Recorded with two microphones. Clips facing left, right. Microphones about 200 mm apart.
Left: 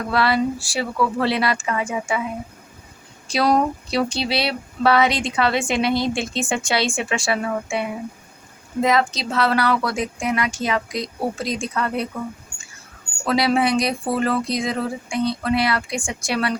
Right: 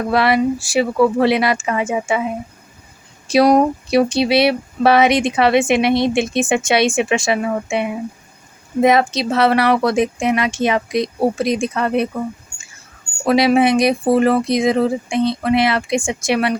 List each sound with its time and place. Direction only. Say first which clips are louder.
0.1 s speech: right 4 dB; 20° right (ahead or behind)
3.2 s speech: right 6 dB; 20° right (ahead or behind)
13.2 s speech: right 6 dB; 20° right (ahead or behind)